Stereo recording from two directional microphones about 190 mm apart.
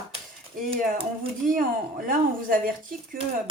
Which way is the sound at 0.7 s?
30° right (ahead or behind).